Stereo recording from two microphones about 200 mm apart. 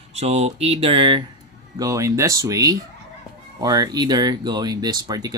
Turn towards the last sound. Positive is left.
turn(degrees=-20)  # may be behind; listen again after turning